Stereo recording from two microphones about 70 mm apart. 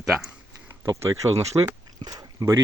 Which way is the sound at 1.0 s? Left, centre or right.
Right.